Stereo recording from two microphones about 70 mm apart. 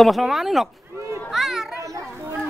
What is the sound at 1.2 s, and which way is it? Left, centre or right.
Children playing, centre.